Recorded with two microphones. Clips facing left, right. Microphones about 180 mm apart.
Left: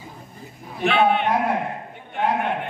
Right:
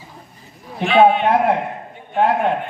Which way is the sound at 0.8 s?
60° left (ahead or behind).